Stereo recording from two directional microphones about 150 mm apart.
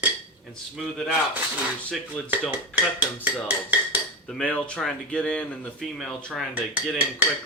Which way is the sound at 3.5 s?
10° right (ahead or behind).